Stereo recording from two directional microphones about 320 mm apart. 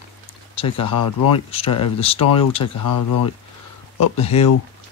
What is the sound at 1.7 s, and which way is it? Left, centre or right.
Speech, left.